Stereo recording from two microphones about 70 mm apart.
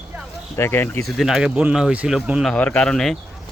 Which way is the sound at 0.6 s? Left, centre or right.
Left.